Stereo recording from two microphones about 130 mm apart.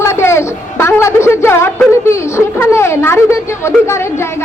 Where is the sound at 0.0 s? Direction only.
20° left (ahead or behind).